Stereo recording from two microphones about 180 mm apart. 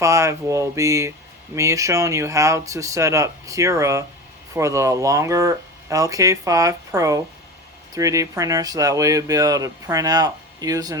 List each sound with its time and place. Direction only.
0.0 s speech: 15° right (ahead or behind)